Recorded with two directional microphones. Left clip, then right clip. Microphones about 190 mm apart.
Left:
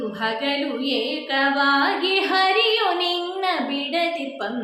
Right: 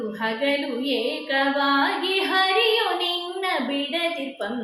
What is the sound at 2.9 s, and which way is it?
Child singing, 20° left (ahead or behind).